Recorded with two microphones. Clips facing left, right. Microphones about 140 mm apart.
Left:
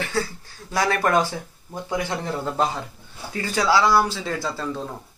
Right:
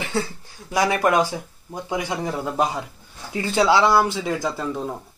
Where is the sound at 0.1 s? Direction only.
25° right (ahead or behind).